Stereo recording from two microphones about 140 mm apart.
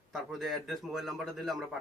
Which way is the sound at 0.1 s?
Centre (ahead or behind).